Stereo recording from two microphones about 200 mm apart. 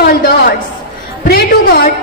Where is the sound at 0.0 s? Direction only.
45° left (ahead or behind).